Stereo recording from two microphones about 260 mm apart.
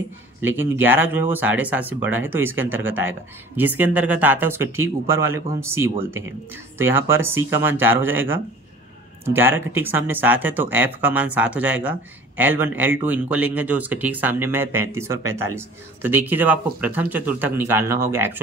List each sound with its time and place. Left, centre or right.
0.4 s speech: centre
9.7 s speech: centre